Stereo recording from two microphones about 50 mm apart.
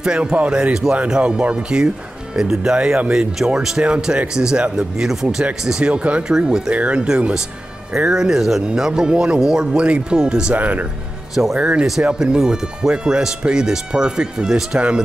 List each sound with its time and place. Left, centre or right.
0.0 s speech: centre
5.4 s speech: right
6.3 s speech: centre
6.7 s speech: right
10.5 s speech: right
11.5 s speech: centre